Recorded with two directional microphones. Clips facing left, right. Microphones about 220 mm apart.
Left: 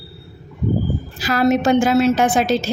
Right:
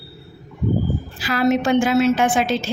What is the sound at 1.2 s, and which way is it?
Speech, 40° left (ahead or behind).